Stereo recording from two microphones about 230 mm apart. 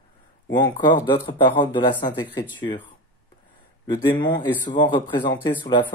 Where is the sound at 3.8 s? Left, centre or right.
Centre.